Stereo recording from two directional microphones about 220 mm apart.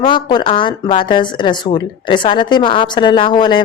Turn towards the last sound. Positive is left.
turn(degrees=20)  # may be behind; listen again after turning